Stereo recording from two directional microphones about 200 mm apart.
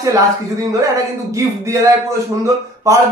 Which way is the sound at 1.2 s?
15° right (ahead or behind).